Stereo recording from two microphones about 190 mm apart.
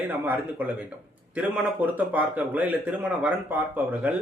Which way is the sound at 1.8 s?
10° right (ahead or behind).